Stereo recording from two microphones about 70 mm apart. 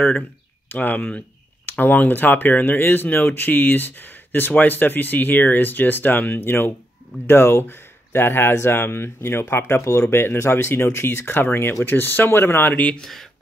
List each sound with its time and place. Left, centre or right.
0.7 s speech: left
12.7 s speech: centre
13.0 s speech: centre